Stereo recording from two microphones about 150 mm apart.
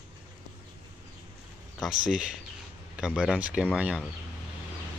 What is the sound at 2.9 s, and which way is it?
Speech, 5° right (ahead or behind).